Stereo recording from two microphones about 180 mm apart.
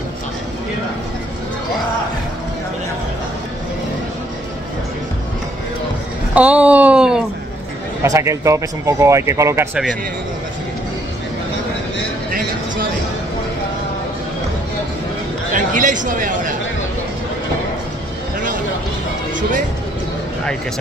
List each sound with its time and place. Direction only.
6.3 s a sound: 5° right (ahead or behind)
8.0 s speech: 15° right (ahead or behind)
15.5 s speech: 45° right (ahead or behind)